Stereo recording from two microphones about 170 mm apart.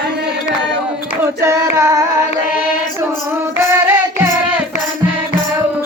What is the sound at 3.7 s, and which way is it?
Music, 15° right (ahead or behind).